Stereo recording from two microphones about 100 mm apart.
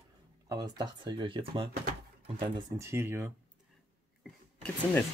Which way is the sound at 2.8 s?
25° right (ahead or behind).